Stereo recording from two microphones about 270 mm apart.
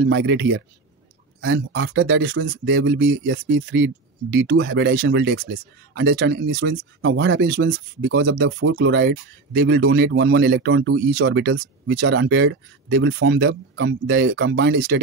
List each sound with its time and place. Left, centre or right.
0.0 s speech: right